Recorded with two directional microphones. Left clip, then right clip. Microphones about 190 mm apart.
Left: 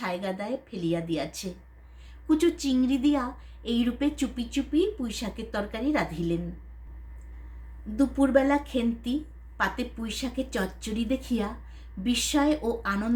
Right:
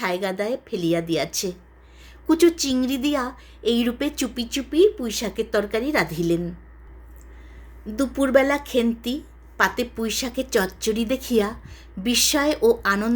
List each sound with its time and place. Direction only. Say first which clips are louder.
0.0 s speech: right 7 dB; 45° right (ahead or behind)
7.9 s speech: right 4 dB; 45° right (ahead or behind)